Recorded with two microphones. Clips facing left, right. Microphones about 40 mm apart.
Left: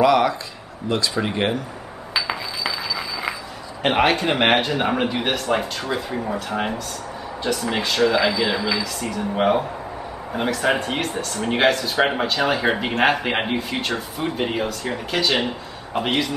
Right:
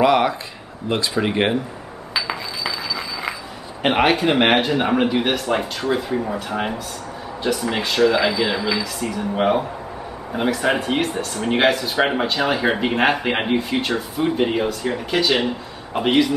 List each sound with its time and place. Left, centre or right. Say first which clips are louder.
0.0 s a sound: even; centre
0.8 s speech: right 2 dB; right
2.1 s chink: even; centre
3.8 s speech: right 1 dB; centre